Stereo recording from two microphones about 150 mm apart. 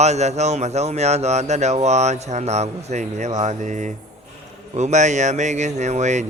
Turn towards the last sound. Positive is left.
turn(degrees=-50)  # may be behind; listen again after turning